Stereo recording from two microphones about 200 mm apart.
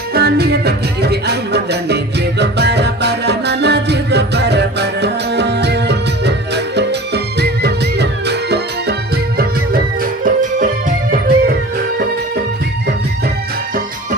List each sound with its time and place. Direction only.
0.1 s music: 50° right (ahead or behind)
10.2 s music: 45° right (ahead or behind)